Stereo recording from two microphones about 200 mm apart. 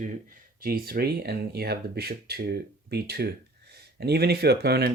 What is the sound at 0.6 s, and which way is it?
Speech, 50° right (ahead or behind).